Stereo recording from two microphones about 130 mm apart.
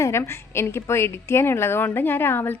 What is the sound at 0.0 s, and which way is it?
A woman's voice, 20° left (ahead or behind).